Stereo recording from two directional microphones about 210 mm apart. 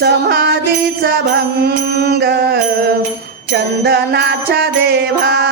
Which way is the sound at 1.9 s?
50° right (ahead or behind).